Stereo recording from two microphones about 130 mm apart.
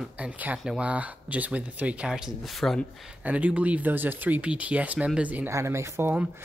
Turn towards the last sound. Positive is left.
turn(degrees=-15)  # may be behind; listen again after turning